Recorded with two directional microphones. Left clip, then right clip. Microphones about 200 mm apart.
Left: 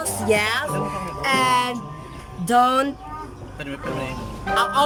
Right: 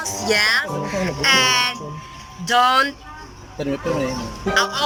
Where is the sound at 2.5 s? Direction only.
15° left (ahead or behind).